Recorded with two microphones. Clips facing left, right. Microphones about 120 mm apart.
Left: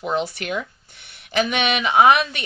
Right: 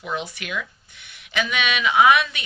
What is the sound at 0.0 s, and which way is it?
Speech, 35° left (ahead or behind).